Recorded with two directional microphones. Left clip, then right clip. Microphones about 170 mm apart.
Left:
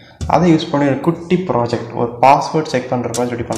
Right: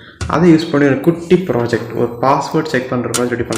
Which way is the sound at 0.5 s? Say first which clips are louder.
Right 3 dB; 15° left (ahead or behind).